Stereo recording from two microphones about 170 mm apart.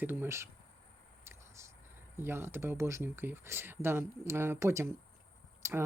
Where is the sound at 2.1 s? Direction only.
15° right (ahead or behind).